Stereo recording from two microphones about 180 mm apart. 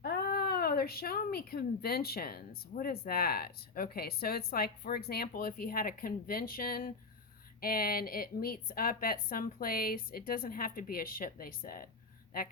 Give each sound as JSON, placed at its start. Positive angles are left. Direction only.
{"t": 0.0, "sound": "a woman's voice", "side_deg": 55}